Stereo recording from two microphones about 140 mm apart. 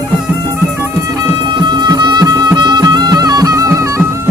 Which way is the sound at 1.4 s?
35° right (ahead or behind).